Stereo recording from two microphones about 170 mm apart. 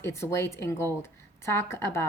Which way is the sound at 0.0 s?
15° left (ahead or behind).